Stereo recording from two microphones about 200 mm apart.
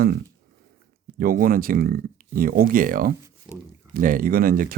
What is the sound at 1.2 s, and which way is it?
Speech, 45° right (ahead or behind).